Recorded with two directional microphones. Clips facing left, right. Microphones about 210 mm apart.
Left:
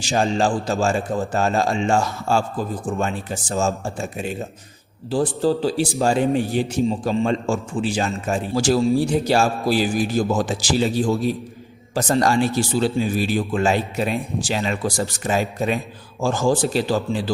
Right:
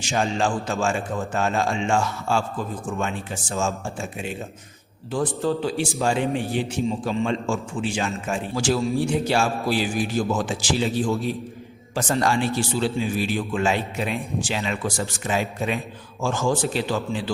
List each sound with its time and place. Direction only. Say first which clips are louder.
0.0 s a man's voice: left 4 dB; 35° left (ahead or behind)